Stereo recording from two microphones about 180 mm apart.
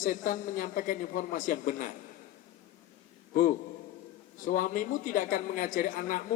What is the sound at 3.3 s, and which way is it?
A man's voice, 45° left (ahead or behind).